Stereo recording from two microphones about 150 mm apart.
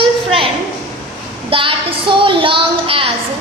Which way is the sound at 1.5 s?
35° right (ahead or behind).